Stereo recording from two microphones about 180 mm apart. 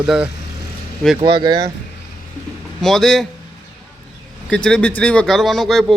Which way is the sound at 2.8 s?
Centre (ahead or behind).